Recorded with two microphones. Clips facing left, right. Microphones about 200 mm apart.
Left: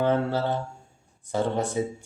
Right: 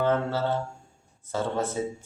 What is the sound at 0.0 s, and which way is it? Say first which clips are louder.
Speech: left 1 dB; 15° left (ahead or behind).